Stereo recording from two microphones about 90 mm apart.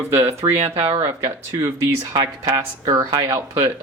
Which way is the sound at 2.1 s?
50° right (ahead or behind).